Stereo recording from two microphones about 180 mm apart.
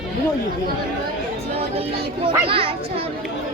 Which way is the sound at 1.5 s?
35° right (ahead or behind).